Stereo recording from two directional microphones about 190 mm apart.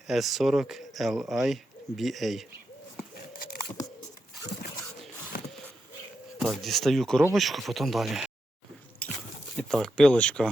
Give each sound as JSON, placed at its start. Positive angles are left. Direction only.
{"t": 0.1, "sound": "speech", "side_deg": 0}
{"t": 3.2, "sound": "a sound", "side_deg": 50}
{"t": 6.4, "sound": "speech", "side_deg": 0}
{"t": 9.0, "sound": "biting", "side_deg": 5}
{"t": 9.6, "sound": "speech", "side_deg": 5}